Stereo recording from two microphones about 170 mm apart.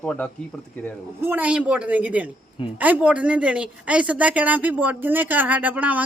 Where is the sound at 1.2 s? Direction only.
10° right (ahead or behind).